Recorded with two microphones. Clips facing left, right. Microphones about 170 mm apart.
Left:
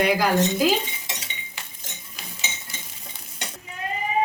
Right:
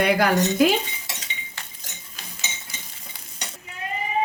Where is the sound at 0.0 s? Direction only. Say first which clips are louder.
Right 1 dB; 60° right (ahead or behind).